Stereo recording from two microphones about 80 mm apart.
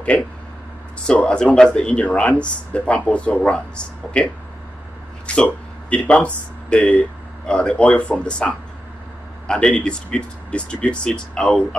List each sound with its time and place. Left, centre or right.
0.1 s speech: centre